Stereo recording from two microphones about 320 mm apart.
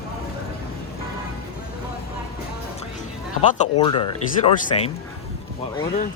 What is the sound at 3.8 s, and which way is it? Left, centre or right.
Speech, centre.